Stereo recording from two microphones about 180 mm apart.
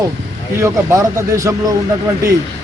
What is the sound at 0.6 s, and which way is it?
Speech, 15° right (ahead or behind).